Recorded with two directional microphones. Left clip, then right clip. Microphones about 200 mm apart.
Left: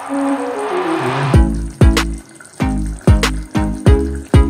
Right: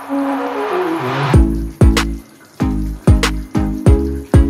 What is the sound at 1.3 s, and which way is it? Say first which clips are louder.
Music: right 1 dB; centre (ahead or behind).